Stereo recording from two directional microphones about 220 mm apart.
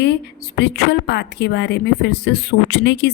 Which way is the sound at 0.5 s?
50° left (ahead or behind).